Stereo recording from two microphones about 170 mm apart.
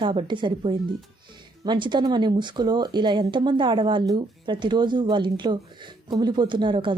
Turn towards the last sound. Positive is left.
turn(degrees=-30)  # may be behind; listen again after turning